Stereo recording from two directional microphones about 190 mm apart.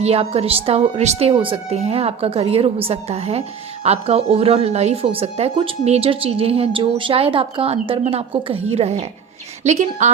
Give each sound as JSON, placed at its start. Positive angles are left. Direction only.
{"t": 0.0, "sound": "speech", "side_deg": -30}